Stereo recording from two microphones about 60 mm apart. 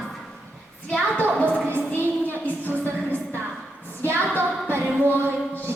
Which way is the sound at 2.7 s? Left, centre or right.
Left.